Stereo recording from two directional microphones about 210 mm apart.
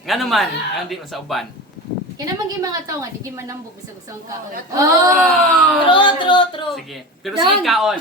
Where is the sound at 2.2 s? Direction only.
15° right (ahead or behind).